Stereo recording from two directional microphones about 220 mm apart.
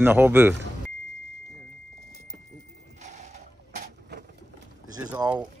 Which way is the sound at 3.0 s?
30° right (ahead or behind).